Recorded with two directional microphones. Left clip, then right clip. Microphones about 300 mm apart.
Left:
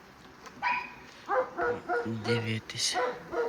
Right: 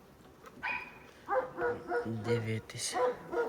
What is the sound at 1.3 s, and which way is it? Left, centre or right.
Bow-wow, left.